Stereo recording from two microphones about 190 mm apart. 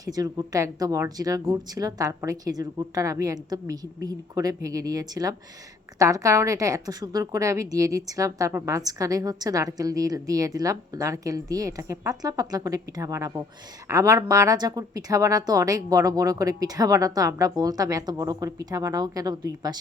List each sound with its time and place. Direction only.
0.0 s a woman's voice: 20° right (ahead or behind)